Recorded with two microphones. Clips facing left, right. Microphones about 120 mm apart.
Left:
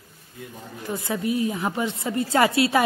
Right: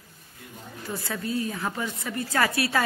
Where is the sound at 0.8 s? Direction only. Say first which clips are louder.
Left 6 dB; 15° left (ahead or behind).